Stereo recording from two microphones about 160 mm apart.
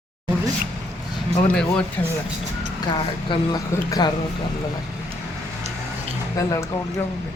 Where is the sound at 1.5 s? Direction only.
5° left (ahead or behind).